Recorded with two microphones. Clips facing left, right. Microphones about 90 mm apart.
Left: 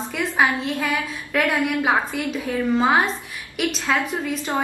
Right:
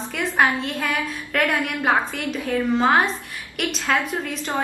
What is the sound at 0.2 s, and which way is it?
A woman's voice, centre (ahead or behind).